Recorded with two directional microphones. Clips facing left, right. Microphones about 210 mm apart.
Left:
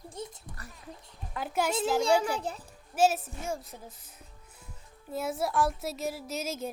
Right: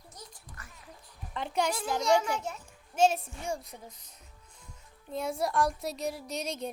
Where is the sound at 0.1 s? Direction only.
25° left (ahead or behind).